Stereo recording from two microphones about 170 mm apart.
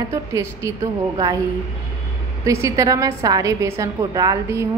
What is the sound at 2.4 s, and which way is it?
A woman's voice, 20° right (ahead or behind).